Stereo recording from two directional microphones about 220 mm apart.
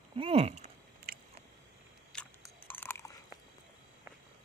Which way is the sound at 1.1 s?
45° right (ahead or behind).